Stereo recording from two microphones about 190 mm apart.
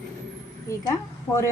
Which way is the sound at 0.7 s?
15° left (ahead or behind).